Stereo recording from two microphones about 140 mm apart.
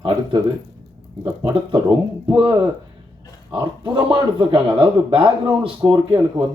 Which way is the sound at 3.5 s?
30° right (ahead or behind).